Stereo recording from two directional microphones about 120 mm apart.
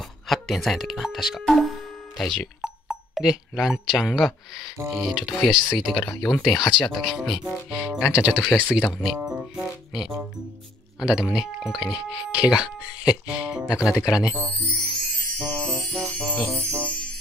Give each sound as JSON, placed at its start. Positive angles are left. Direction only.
{"t": 0.3, "sound": "speech", "side_deg": 0}
{"t": 9.4, "sound": "music", "side_deg": -5}
{"t": 11.0, "sound": "speech", "side_deg": -5}
{"t": 15.3, "sound": "music", "side_deg": 5}